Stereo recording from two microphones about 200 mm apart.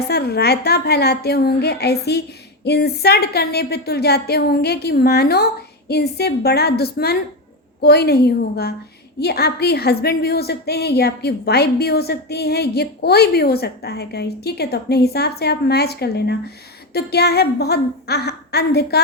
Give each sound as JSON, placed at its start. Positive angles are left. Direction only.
{"t": 0.1, "sound": "a woman's voice", "side_deg": 55}